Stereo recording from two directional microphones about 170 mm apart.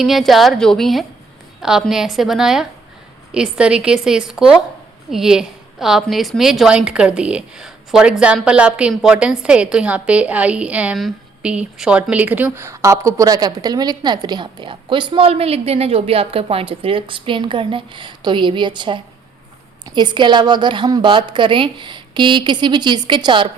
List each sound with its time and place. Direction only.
0.0 s a woman's voice: centre (ahead or behind); by 23.5 s 25° right (ahead or behind)